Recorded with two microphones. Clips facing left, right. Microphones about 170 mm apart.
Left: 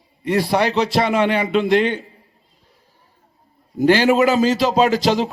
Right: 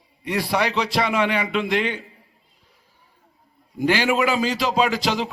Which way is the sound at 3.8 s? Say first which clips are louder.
Left 6 dB; 40° left (ahead or behind).